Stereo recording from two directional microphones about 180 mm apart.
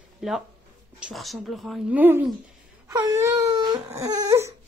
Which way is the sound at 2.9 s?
20° right (ahead or behind).